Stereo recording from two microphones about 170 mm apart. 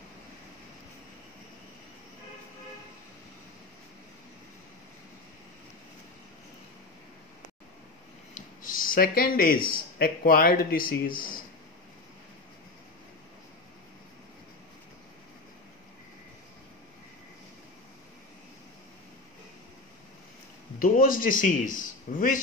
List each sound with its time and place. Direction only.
8.4 s a sound: 55° left (ahead or behind)
9.7 s speech: 55° left (ahead or behind)
20.8 s a man's voice: 55° left (ahead or behind)